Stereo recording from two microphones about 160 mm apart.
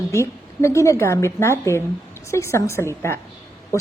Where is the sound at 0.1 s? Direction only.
15° left (ahead or behind).